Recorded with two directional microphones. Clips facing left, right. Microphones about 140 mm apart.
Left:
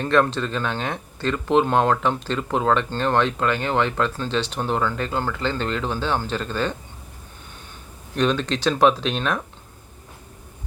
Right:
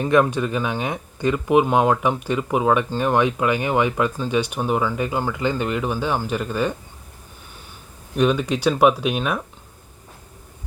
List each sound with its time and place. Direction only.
0.0 s speech: 10° right (ahead or behind)
8.1 s speech: 10° right (ahead or behind)